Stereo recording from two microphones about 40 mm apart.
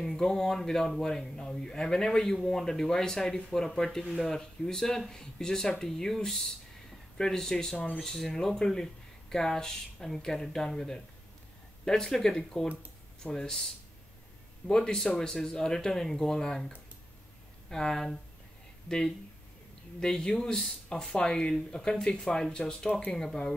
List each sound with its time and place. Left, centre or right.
0.0 s speech: centre
20.0 s speech: centre